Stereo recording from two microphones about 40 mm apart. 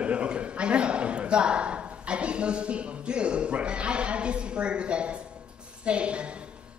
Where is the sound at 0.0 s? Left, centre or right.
Right.